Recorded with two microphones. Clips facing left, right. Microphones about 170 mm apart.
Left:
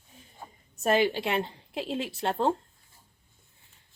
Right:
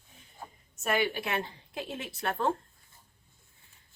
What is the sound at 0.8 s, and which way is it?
Speech, 30° left (ahead or behind).